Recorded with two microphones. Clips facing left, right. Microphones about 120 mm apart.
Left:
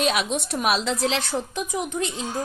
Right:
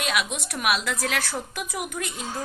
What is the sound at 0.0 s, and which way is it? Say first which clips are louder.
A woman's voice: left 4 dB; 30° left (ahead or behind).